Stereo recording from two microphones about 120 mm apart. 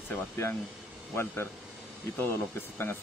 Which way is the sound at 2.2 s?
20° left (ahead or behind).